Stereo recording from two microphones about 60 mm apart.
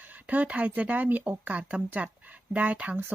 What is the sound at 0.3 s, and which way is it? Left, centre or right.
Speech, right.